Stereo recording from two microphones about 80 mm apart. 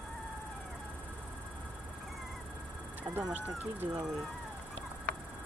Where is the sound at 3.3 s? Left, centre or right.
Right.